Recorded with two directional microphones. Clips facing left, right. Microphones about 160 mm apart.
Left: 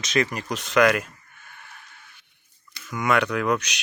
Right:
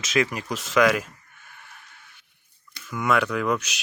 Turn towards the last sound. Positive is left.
turn(degrees=0)  # may be behind; listen again after turning